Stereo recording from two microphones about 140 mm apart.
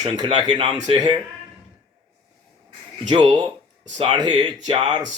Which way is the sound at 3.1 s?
35° right (ahead or behind).